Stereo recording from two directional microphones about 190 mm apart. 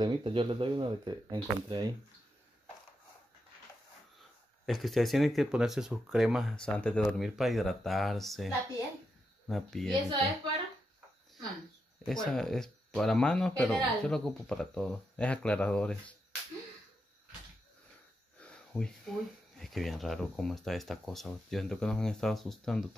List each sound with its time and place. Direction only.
0.0 s speech: 25° right (ahead or behind)
4.6 s speech: centre (ahead or behind)
12.0 s speech: 5° left (ahead or behind)
18.4 s a sound: 5° left (ahead or behind)
19.6 s speech: centre (ahead or behind)